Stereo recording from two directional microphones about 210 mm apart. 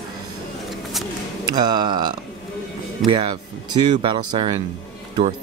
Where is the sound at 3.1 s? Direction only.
25° right (ahead or behind).